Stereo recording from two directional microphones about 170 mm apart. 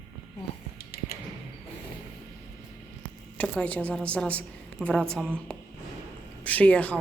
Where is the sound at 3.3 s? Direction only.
5° left (ahead or behind).